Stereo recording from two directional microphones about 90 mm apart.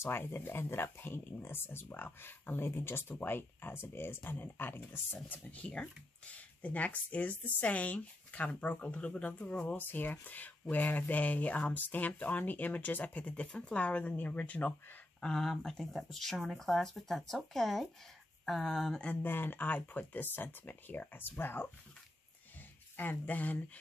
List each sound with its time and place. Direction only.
0.0 s speech: 25° left (ahead or behind)
15.1 s speech: 5° left (ahead or behind)
19.0 s speech: 20° left (ahead or behind)
22.9 s speech: 20° left (ahead or behind)